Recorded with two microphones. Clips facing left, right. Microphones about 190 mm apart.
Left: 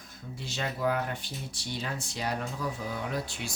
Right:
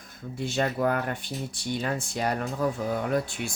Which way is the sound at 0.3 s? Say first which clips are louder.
Right 8 dB; 55° right (ahead or behind).